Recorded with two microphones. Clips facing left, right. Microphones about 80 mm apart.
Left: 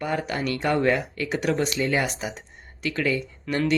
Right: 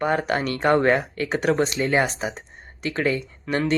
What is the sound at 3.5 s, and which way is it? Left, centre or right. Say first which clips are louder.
Speech: right 2 dB; centre.